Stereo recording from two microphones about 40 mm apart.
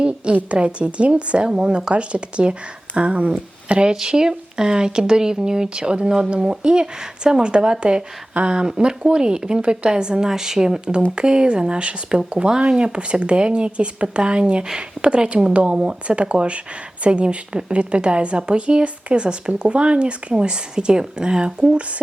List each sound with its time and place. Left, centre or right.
0.5 s a woman's voice: right